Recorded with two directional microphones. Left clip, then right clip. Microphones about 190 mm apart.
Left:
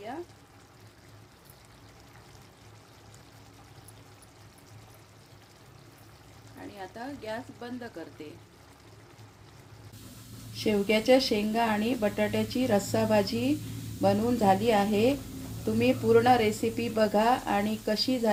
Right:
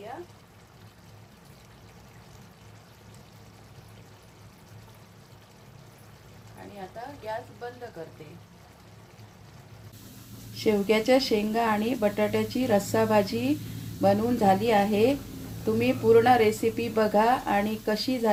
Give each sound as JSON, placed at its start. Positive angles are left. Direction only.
{"t": 10.6, "sound": "speech", "side_deg": 5}